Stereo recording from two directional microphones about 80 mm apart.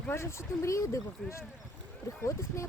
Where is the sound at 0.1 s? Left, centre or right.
Left.